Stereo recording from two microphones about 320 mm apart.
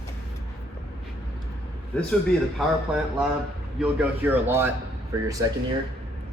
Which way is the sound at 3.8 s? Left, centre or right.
Centre.